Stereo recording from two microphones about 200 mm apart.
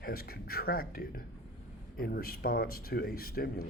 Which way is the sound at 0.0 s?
50° left (ahead or behind).